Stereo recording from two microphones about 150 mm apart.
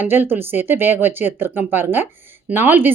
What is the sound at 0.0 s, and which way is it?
A woman's voice, 15° right (ahead or behind).